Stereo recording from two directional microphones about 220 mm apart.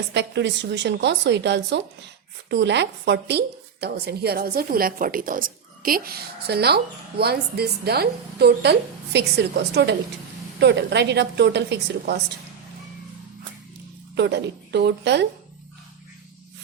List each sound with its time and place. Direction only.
0.1 s a woman's voice: 50° right (ahead or behind)
14.2 s a woman's voice: 50° right (ahead or behind)